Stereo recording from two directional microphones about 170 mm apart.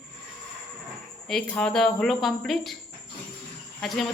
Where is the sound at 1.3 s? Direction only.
5° left (ahead or behind).